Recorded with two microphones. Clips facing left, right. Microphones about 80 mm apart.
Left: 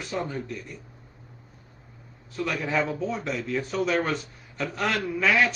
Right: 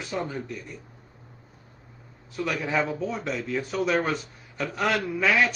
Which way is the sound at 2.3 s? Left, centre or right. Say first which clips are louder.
Even; centre.